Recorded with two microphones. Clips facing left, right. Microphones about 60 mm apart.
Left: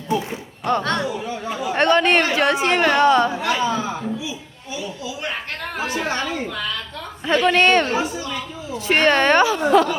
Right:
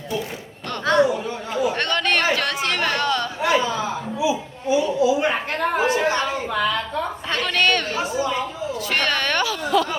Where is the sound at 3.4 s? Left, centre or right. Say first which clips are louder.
Right 2 dB; centre.